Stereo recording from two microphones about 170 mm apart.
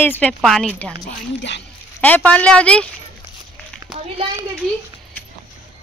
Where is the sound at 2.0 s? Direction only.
10° left (ahead or behind).